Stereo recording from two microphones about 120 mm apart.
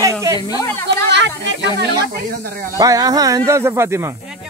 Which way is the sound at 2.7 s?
30° right (ahead or behind).